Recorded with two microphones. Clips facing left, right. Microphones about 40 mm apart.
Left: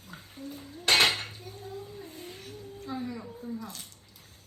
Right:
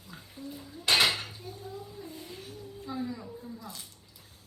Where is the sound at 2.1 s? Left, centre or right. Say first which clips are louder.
Even; left.